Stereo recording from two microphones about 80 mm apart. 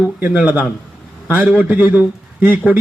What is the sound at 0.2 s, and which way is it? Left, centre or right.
A man's voice, centre.